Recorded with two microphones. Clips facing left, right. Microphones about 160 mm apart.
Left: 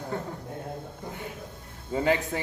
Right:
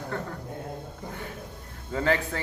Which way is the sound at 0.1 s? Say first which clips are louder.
Even; 15° left (ahead or behind).